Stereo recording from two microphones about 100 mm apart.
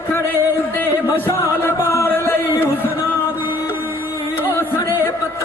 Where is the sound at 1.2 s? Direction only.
25° left (ahead or behind).